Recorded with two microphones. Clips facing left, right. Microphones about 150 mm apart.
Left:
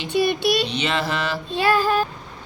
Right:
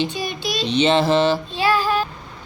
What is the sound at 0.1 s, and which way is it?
Child singing, 60° left (ahead or behind).